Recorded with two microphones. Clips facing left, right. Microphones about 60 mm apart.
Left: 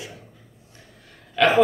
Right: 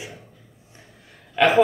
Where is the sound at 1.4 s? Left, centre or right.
Centre.